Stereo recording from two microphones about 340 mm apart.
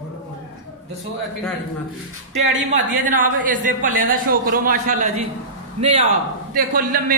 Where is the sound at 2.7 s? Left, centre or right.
Right.